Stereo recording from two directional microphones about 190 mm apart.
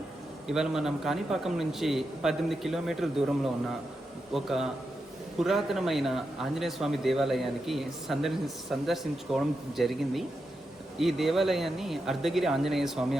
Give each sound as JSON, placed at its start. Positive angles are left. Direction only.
{"t": 0.4, "sound": "a man's voice", "side_deg": 0}